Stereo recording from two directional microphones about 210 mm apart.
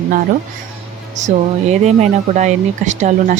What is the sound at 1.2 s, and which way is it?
Speech, 35° right (ahead or behind).